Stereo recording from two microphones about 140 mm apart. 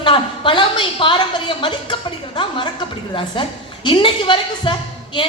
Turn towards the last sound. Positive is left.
turn(degrees=35)  # may be behind; listen again after turning